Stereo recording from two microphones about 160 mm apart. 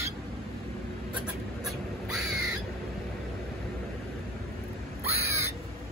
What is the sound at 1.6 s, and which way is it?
Crow, centre (ahead or behind).